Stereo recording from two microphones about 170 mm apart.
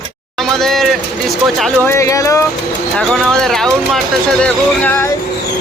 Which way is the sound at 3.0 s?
5° left (ahead or behind).